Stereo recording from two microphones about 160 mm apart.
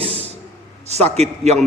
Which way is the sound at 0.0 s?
40° right (ahead or behind).